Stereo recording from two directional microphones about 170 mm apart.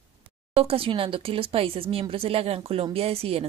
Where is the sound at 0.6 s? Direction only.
35° right (ahead or behind).